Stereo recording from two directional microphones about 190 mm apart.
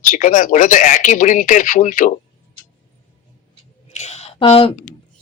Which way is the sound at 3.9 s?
35° left (ahead or behind).